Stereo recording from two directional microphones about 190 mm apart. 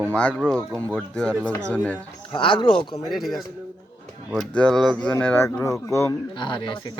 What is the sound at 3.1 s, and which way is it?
Speech, centre (ahead or behind).